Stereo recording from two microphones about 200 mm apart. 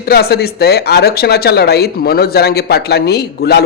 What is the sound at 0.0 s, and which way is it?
Speech, 50° left (ahead or behind).